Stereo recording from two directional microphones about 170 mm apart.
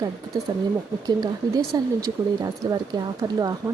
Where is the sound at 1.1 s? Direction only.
25° right (ahead or behind).